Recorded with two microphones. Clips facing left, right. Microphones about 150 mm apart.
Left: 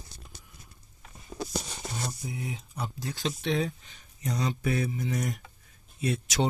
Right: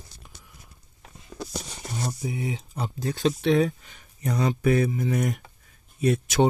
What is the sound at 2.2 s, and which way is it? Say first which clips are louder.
Speech: right 6 dB; 90° right.